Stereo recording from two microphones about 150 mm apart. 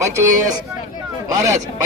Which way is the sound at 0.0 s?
20° right (ahead or behind).